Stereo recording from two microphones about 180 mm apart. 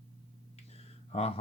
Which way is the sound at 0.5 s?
35° left (ahead or behind).